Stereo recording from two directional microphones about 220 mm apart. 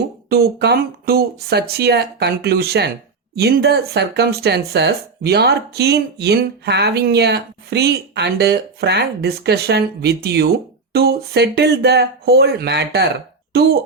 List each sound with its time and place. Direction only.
0.3 s speech: 45° right (ahead or behind)